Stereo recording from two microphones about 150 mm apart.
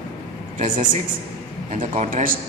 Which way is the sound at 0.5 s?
60° right (ahead or behind).